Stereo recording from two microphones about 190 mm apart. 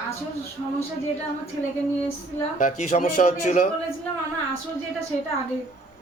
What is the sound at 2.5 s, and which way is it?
Speech, 40° left (ahead or behind).